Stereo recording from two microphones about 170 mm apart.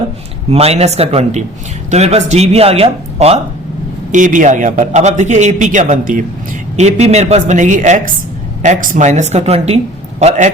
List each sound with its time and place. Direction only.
0.5 s speech: 35° right (ahead or behind)
4.1 s a man's voice: 50° right (ahead or behind)